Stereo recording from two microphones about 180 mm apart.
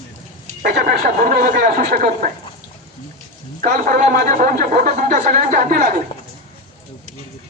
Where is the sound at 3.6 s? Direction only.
45° right (ahead or behind).